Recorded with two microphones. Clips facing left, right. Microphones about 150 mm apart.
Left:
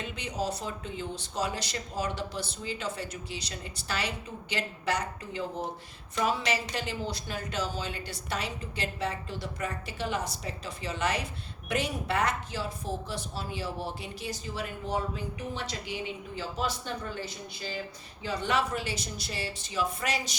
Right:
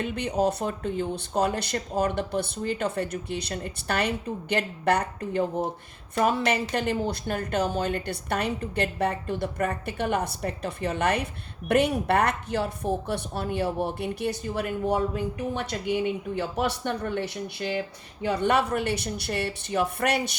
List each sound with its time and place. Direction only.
0.0 s a woman's voice: 55° right (ahead or behind)